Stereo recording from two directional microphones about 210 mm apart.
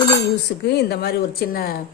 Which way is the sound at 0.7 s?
50° left (ahead or behind).